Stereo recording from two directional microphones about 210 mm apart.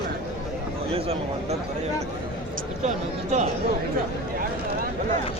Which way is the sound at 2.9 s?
35° right (ahead or behind).